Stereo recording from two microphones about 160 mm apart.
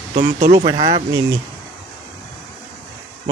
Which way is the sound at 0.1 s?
50° right (ahead or behind).